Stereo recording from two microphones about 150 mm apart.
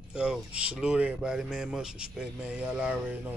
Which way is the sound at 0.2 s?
5° right (ahead or behind).